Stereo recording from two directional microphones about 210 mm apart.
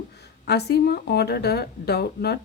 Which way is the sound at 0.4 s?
50° left (ahead or behind).